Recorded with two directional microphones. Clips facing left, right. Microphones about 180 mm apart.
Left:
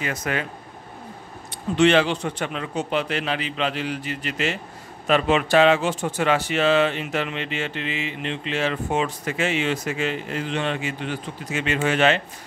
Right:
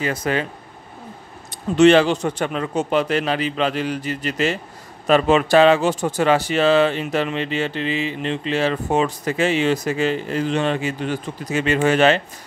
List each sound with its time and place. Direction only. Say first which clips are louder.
0.0 s speech: right 5 dB; 30° right (ahead or behind)
1.8 s speech: right 5 dB; 40° right (ahead or behind)